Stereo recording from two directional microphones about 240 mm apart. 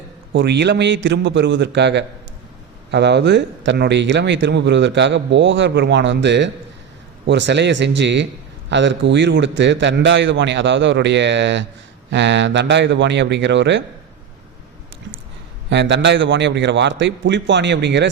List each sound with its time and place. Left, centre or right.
0.3 s speech: right
15.7 s speech: right